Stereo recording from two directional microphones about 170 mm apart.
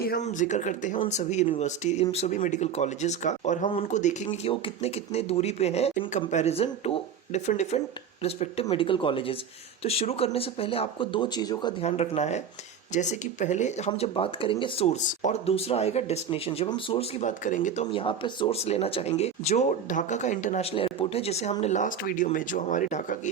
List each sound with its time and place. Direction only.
0.2 s speech: 45° left (ahead or behind); by 11.7 s 25° left (ahead or behind)
11.8 s speech: 40° left (ahead or behind)
17.9 s speech: 30° left (ahead or behind); by 23.3 s 45° left (ahead or behind)